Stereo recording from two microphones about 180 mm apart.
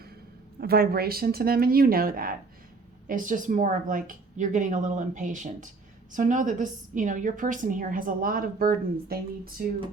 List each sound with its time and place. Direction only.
0.6 s a woman's voice: 60° right (ahead or behind)